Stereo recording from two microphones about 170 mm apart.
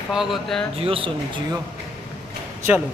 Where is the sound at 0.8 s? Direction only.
30° right (ahead or behind).